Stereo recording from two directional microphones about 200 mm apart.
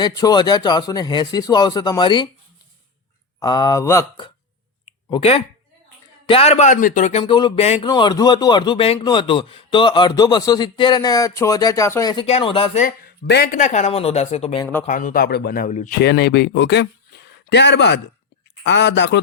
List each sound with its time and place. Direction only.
0.0 s speech: 20° left (ahead or behind)
3.4 s speech: 20° left (ahead or behind)
5.0 s speech: 25° left (ahead or behind)
12.2 s speech: 30° left (ahead or behind)
12.8 s speech: 50° left (ahead or behind); by 14.6 s 30° left (ahead or behind)
14.6 s speech: 10° left (ahead or behind)
14.8 s speech: 40° left (ahead or behind)
16.0 s speech: 55° left (ahead or behind)